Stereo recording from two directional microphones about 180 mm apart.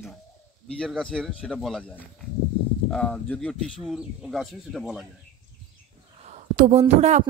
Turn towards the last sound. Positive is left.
turn(degrees=-40)  # may be behind; listen again after turning